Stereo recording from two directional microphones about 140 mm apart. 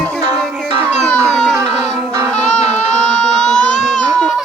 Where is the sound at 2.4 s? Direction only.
55° left (ahead or behind).